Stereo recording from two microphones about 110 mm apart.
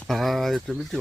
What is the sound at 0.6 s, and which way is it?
Speech, centre (ahead or behind).